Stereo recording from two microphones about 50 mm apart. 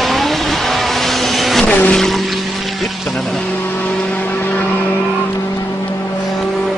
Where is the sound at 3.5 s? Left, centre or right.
Left.